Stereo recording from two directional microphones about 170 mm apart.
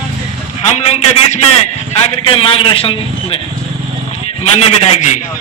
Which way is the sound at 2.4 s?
30° left (ahead or behind).